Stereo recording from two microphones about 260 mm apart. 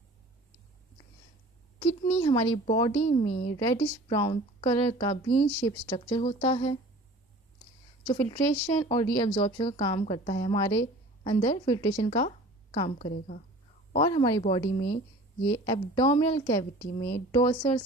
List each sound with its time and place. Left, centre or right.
1.8 s speech: left
8.0 s a woman's voice: centre
16.7 s a woman's voice: left
17.3 s a woman's voice: centre